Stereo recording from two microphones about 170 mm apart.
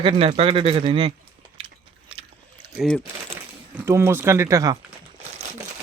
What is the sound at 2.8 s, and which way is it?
Speech, 5° left (ahead or behind).